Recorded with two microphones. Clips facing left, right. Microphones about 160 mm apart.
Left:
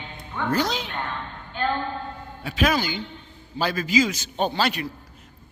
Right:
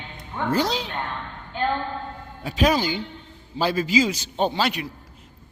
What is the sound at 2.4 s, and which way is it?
A man's voice, 35° right (ahead or behind).